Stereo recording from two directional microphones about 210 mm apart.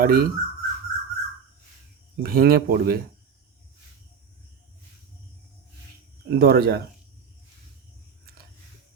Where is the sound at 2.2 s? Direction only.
45° right (ahead or behind).